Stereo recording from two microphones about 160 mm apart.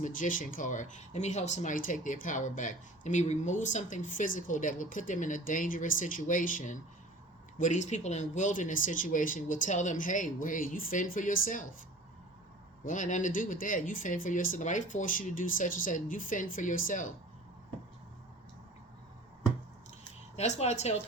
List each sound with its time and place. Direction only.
0.0 s speech: 55° left (ahead or behind)
12.8 s speech: 55° left (ahead or behind)
20.3 s speech: 45° left (ahead or behind)